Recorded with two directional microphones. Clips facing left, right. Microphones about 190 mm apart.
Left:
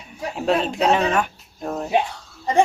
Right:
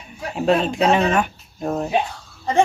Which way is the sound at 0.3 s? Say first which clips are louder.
Right 3 dB; centre (ahead or behind).